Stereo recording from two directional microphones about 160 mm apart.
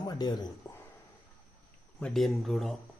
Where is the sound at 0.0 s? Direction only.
25° left (ahead or behind).